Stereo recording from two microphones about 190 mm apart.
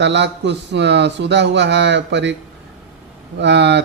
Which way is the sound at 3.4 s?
65° right (ahead or behind).